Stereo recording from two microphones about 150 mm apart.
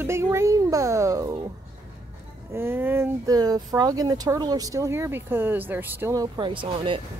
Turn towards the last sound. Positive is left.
turn(degrees=-35)  # may be behind; listen again after turning